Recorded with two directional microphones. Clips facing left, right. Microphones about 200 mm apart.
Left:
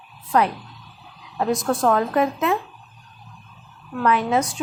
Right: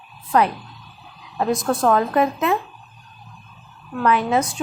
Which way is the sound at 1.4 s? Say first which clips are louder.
Right 1 dB; 10° right (ahead or behind).